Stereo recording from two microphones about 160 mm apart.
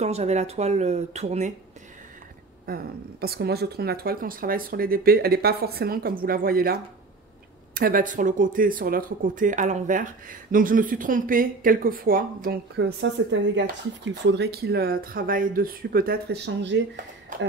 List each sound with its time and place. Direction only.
0.0 s speech: 45° right (ahead or behind)
2.6 s speech: 70° right (ahead or behind)
14.2 s speech: 90° right